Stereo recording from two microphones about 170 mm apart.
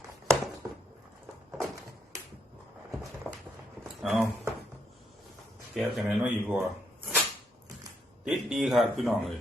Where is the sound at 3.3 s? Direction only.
10° right (ahead or behind).